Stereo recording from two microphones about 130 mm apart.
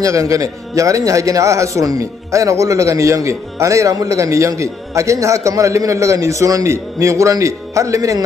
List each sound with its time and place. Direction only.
0.0 s a man's voice: 25° right (ahead or behind)